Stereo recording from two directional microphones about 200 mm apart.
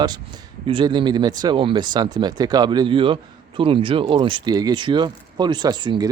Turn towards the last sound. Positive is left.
turn(degrees=-20)  # may be behind; listen again after turning